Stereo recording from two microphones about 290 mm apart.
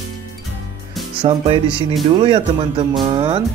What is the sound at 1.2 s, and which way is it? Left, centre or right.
Speech, centre.